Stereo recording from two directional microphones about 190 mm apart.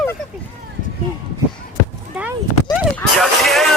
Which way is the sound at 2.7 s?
Centre (ahead or behind).